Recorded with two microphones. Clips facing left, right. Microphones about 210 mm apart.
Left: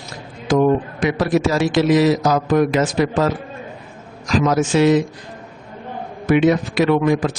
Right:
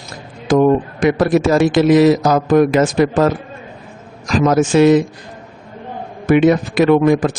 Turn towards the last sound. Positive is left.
turn(degrees=-50)  # may be behind; listen again after turning